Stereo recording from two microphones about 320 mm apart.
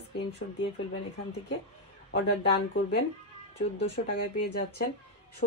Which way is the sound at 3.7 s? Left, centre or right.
Centre.